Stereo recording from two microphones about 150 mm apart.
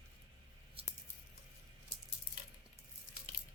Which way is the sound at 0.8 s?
40° right (ahead or behind).